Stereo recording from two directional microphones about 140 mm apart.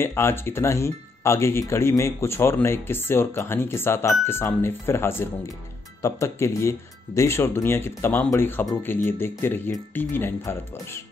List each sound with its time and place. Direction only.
0.0 s speech: 15° left (ahead or behind)